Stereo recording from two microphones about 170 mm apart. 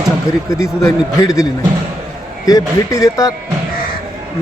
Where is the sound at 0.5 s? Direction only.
20° left (ahead or behind).